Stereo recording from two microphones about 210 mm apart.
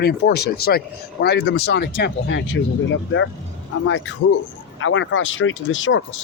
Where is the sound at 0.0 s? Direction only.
50° left (ahead or behind).